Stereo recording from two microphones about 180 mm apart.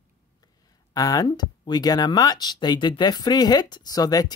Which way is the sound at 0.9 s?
20° left (ahead or behind).